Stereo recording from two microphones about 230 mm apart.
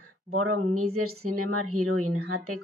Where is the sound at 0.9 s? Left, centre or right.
Right.